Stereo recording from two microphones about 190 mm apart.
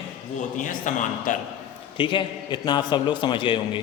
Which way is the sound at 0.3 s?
45° left (ahead or behind).